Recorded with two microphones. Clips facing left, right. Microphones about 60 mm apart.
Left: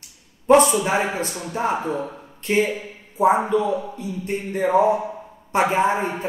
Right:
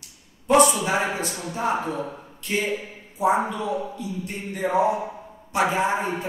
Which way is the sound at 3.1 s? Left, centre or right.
Left.